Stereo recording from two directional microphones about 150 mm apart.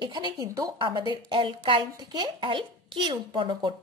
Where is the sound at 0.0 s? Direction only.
30° right (ahead or behind).